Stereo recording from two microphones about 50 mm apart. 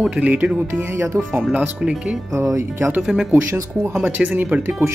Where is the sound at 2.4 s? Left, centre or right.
Right.